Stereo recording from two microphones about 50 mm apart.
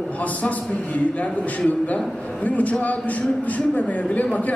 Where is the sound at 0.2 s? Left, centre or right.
Left.